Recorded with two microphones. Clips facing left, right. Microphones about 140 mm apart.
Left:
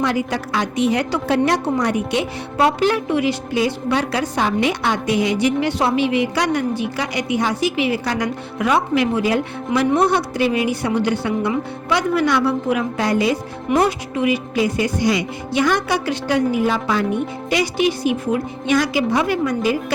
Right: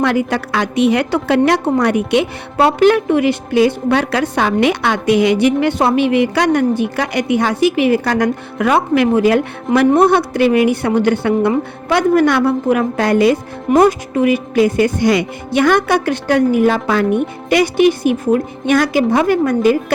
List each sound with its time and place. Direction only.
0.0 s a woman's voice: 60° right (ahead or behind)
13.7 s a woman's voice: 45° right (ahead or behind)